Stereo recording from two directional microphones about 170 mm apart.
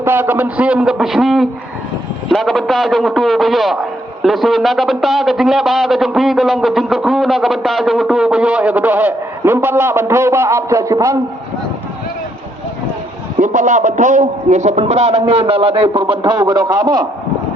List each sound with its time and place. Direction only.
0.0 s a man's voice: 15° right (ahead or behind)
13.4 s a man's voice: 50° right (ahead or behind); by 17.1 s 25° right (ahead or behind)